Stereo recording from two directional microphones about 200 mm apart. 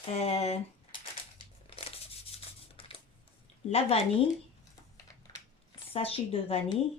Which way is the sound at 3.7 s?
30° left (ahead or behind).